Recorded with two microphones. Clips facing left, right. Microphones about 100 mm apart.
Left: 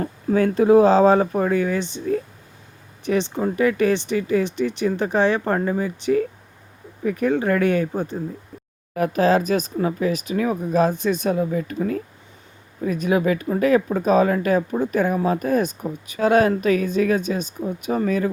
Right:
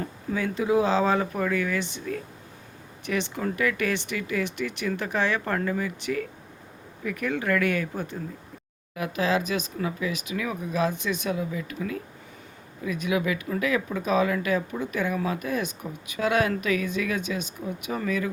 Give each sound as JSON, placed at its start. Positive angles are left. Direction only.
{"t": 0.0, "sound": "speech", "side_deg": 45}
{"t": 9.0, "sound": "speech", "side_deg": 45}